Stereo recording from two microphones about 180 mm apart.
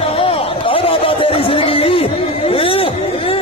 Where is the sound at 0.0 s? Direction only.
30° left (ahead or behind).